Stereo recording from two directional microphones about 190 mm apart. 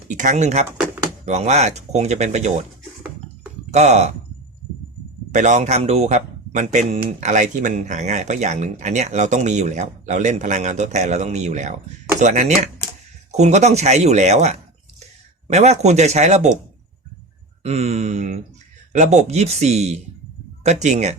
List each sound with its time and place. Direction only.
0.1 s speech: 40° right (ahead or behind)
3.7 s speech: 35° right (ahead or behind)
5.3 s speech: 40° right (ahead or behind)
17.6 s speech: 35° right (ahead or behind)